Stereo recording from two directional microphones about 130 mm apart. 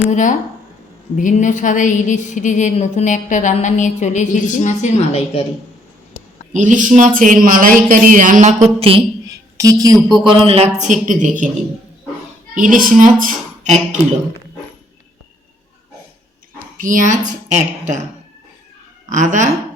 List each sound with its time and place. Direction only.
0.1 s a woman's voice: 75° left (ahead or behind); by 5.5 s 50° left (ahead or behind)
6.5 s speech: 80° right; by 9.0 s 45° right (ahead or behind)
9.3 s a sound: 25° right (ahead or behind)
10.2 s speech: 45° right (ahead or behind)
10.8 s speech: 70° right (ahead or behind)
12.5 s a woman's voice: 90° right
16.7 s speech: 90° right; by 18.0 s 70° right (ahead or behind)
19.0 s speech: 80° right